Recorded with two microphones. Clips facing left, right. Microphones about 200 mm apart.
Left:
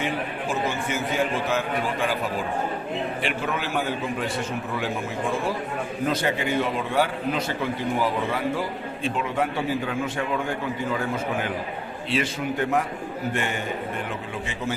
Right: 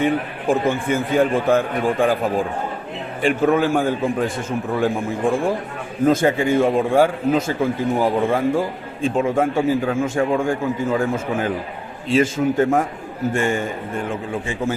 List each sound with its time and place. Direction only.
0.0 s a man's voice: 55° right (ahead or behind)